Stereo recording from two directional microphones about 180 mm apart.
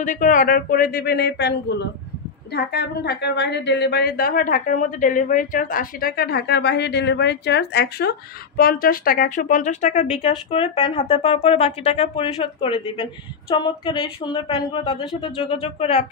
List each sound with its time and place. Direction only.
0.0 s a woman's voice: 45° left (ahead or behind)